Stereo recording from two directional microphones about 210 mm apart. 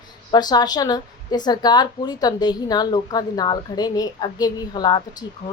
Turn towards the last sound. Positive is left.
turn(degrees=20)  # may be behind; listen again after turning